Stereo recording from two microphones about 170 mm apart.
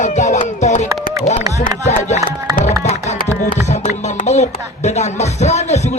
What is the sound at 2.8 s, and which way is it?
Music, 40° left (ahead or behind).